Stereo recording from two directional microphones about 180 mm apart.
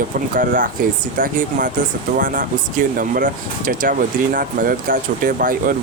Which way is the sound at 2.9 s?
50° right (ahead or behind).